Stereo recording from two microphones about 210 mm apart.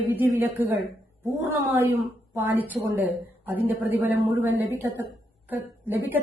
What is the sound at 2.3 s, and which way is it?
A woman's voice, 10° right (ahead or behind).